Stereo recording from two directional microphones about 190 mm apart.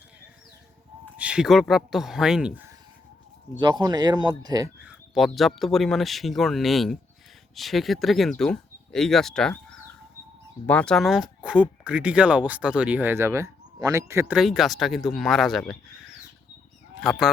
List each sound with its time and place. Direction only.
1.1 s speech: 5° right (ahead or behind)
3.6 s speech: 25° right (ahead or behind)
4.8 s speech: 5° right (ahead or behind)
14.3 s speech: centre (ahead or behind)